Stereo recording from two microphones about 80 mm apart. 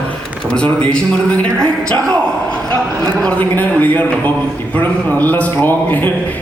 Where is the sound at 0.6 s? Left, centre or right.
Centre.